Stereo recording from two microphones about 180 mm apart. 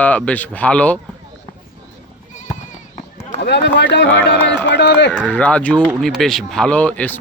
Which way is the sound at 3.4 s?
70° left (ahead or behind).